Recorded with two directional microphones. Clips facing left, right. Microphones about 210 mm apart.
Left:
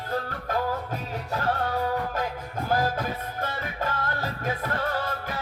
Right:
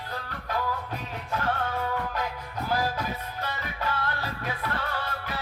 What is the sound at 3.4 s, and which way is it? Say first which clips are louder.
Music: left 2 dB; 45° left (ahead or behind).